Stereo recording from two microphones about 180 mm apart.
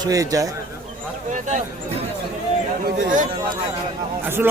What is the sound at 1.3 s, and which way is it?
Speech, 40° right (ahead or behind).